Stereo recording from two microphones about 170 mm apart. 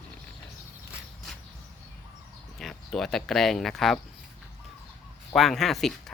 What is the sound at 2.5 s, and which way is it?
Speech, centre (ahead or behind).